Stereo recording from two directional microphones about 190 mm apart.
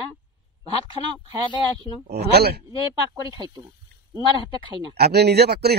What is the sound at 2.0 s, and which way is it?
Speech, 60° right (ahead or behind).